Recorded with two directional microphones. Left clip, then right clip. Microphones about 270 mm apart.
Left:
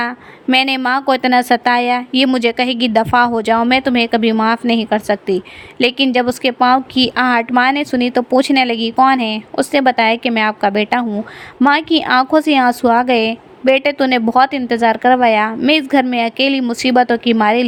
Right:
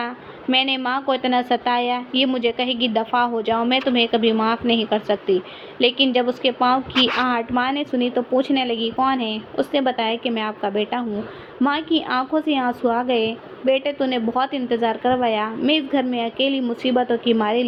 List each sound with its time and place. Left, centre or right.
0.5 s a woman's voice: left
9.2 s speech: left
9.7 s a woman's voice: left
11.8 s speech: left
12.0 s a woman's voice: left